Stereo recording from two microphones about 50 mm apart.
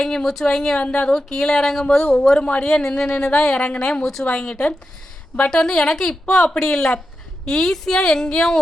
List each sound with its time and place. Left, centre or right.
0.0 s a woman's voice: centre
2.3 s a woman's voice: left
4.0 s speech: centre
4.3 s a woman's voice: left